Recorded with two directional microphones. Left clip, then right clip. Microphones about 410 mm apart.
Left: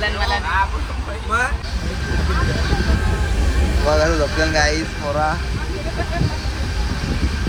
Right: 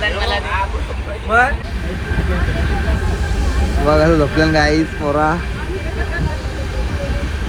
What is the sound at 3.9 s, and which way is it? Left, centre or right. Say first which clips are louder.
Speech: right 4 dB; right.